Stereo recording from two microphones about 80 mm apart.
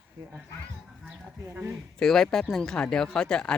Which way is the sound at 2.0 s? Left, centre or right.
Centre.